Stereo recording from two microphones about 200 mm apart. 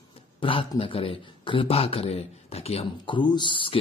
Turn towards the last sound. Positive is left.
turn(degrees=25)  # may be behind; listen again after turning